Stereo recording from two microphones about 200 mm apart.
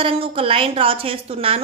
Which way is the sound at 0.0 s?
30° right (ahead or behind).